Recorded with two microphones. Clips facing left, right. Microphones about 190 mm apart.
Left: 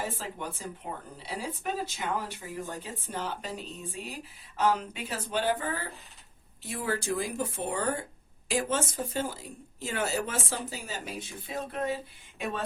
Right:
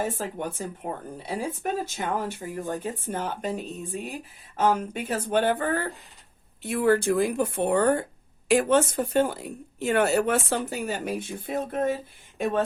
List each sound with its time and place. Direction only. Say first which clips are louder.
0.0 s speech: right 6 dB; 50° right (ahead or behind)